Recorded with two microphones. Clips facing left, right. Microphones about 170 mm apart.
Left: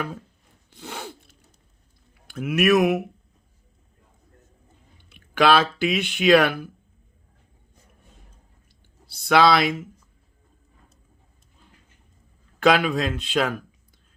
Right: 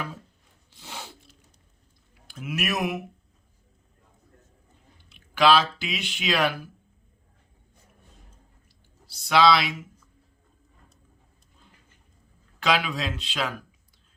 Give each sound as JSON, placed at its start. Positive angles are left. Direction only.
{"t": 0.7, "sound": "a sound", "side_deg": 55}
{"t": 2.2, "sound": "speech", "side_deg": 60}
{"t": 5.0, "sound": "speech", "side_deg": 55}
{"t": 9.0, "sound": "speech", "side_deg": 55}
{"t": 12.5, "sound": "a man's voice", "side_deg": 50}